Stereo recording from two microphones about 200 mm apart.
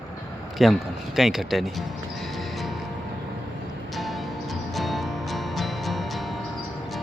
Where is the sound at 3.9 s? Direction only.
Centre (ahead or behind).